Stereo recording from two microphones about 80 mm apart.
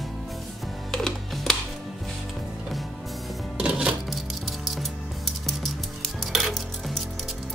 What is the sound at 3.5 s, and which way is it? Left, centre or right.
Music, centre.